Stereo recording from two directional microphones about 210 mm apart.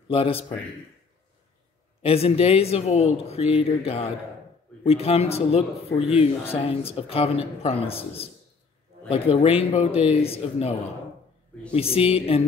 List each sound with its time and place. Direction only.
0.1 s speech: 25° left (ahead or behind)
2.0 s speech: 30° left (ahead or behind)